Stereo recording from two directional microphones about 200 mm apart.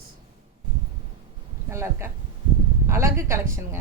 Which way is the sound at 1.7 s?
15° right (ahead or behind).